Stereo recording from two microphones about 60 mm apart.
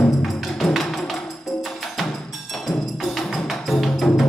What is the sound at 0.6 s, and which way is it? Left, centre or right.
Music, centre.